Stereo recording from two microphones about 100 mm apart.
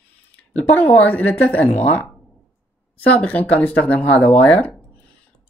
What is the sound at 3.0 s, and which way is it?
Speech, 15° left (ahead or behind).